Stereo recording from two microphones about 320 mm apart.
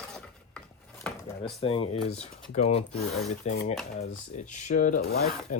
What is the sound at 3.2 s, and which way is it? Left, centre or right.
Rub, left.